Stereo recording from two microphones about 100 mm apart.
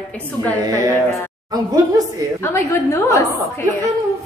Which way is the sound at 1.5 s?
35° right (ahead or behind).